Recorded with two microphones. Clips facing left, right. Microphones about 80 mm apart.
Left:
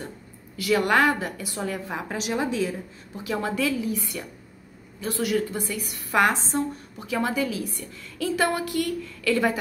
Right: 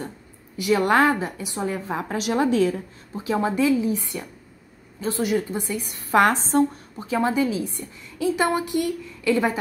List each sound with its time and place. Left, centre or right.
0.6 s a woman's voice: right
2.0 s a woman's voice: right
3.3 s a woman's voice: right
6.1 s a woman's voice: right
7.0 s a woman's voice: right